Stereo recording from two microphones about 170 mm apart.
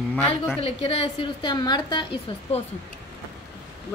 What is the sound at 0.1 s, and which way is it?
Speech, 10° left (ahead or behind).